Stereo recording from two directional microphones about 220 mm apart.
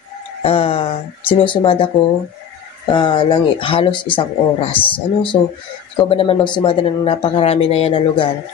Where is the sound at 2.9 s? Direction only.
20° left (ahead or behind).